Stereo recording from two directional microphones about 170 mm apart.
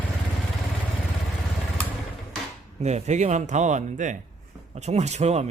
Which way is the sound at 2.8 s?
45° right (ahead or behind).